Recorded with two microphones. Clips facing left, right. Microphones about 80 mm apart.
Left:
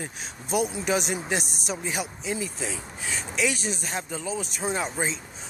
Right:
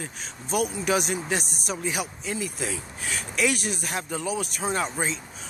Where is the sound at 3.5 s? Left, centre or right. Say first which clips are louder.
Right 1 dB; right.